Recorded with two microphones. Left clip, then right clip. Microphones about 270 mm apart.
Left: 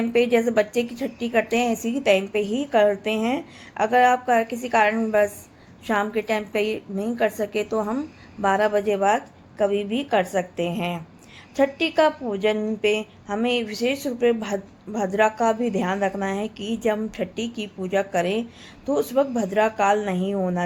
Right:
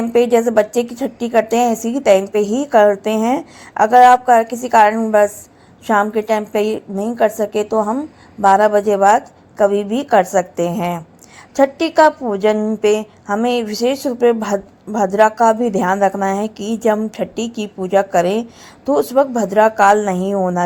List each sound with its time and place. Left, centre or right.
0.1 s a woman's voice: centre